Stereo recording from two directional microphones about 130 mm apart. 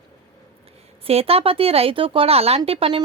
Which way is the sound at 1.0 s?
50° right (ahead or behind).